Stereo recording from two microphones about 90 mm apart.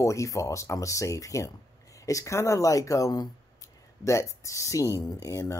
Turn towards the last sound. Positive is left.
turn(degrees=35)  # may be behind; listen again after turning